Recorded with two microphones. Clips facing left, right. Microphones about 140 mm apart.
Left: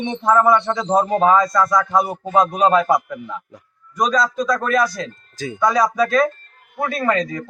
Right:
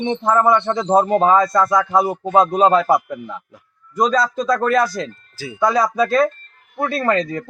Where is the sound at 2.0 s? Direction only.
Centre (ahead or behind).